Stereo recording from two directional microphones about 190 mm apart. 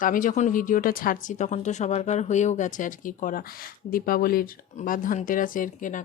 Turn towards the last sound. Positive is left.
turn(degrees=45)  # may be behind; listen again after turning